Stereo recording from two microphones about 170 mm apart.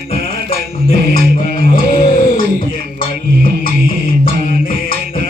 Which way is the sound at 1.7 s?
55° left (ahead or behind).